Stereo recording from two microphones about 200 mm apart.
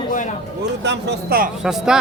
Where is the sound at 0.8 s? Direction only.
60° right (ahead or behind).